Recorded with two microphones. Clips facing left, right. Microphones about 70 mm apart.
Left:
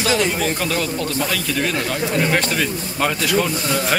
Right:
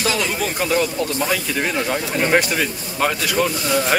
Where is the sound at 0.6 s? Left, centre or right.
Centre.